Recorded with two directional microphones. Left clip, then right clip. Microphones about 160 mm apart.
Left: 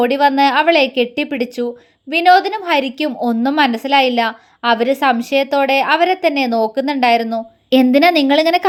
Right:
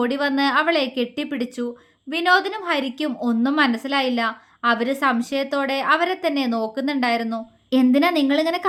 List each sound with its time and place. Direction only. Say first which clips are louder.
0.0 s a woman's voice: left 9 dB; 20° left (ahead or behind)